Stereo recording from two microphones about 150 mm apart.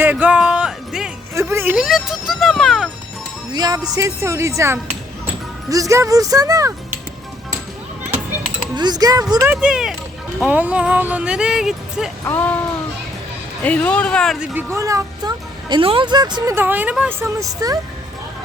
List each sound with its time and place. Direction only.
0.0 s music: 10° right (ahead or behind)
1.4 s a sound: 15° right (ahead or behind); by 2.9 s centre (ahead or behind)
3.5 s speech: 25° right (ahead or behind)
8.7 s speech: 30° right (ahead or behind)
9.3 s speech: 15° right (ahead or behind)
12.2 s speech: 10° left (ahead or behind)
13.6 s speech: 10° left (ahead or behind)
14.3 s speech: 5° right (ahead or behind)
14.7 s speech: 20° right (ahead or behind)
16.6 s speech: 10° right (ahead or behind)